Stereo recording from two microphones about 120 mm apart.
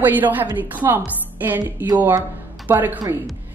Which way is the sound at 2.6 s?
15° right (ahead or behind).